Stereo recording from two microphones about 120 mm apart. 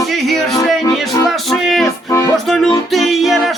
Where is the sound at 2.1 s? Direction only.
30° left (ahead or behind).